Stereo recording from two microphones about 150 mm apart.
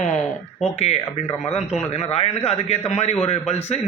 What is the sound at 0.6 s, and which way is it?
A man's voice, 45° left (ahead or behind).